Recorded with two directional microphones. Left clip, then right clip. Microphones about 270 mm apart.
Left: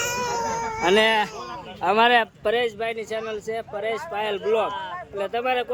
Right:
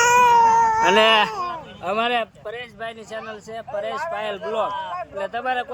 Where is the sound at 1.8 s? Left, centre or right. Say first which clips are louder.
Left 4 dB; centre.